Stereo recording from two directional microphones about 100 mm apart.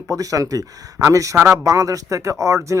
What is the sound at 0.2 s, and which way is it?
Speech, 35° right (ahead or behind).